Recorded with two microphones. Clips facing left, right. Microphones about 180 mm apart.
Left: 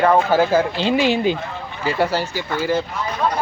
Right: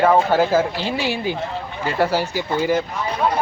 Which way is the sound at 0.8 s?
20° left (ahead or behind).